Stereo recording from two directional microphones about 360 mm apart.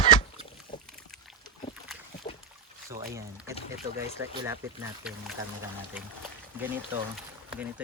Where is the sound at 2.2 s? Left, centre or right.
Centre.